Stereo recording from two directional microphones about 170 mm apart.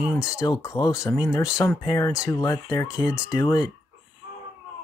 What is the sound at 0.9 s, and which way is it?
Speech, 5° right (ahead or behind).